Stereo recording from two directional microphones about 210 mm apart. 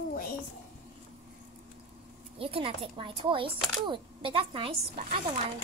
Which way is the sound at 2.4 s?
25° right (ahead or behind).